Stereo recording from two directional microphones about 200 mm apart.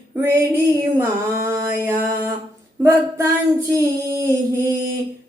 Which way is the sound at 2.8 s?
10° right (ahead or behind).